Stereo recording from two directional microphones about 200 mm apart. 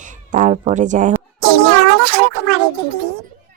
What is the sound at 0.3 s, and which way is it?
Speech, 35° right (ahead or behind).